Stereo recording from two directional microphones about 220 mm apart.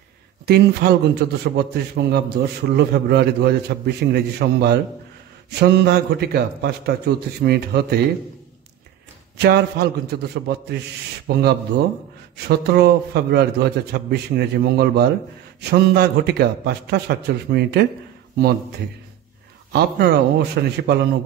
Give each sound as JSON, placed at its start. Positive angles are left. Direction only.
{"t": 0.5, "sound": "a man's voice", "side_deg": -45}
{"t": 9.4, "sound": "a man's voice", "side_deg": -45}
{"t": 19.7, "sound": "a man's voice", "side_deg": -50}